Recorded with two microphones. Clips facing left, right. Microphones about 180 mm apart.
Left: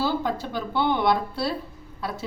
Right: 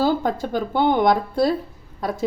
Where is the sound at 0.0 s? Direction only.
45° right (ahead or behind).